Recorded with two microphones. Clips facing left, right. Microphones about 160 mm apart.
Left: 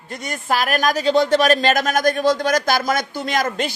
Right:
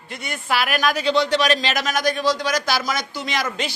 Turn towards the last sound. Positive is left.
turn(degrees=50)  # may be behind; listen again after turning